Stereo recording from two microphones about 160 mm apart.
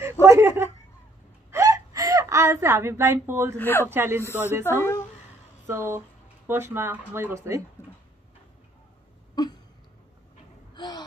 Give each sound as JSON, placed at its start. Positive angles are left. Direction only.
{"t": 0.0, "sound": "a sound", "side_deg": -15}
{"t": 1.5, "sound": "whimper", "side_deg": -20}
{"t": 3.5, "sound": "speech", "side_deg": 15}
{"t": 3.9, "sound": "speech", "side_deg": -15}
{"t": 5.7, "sound": "speech", "side_deg": -15}
{"t": 9.3, "sound": "a sound", "side_deg": 25}
{"t": 10.7, "sound": "gasp", "side_deg": 25}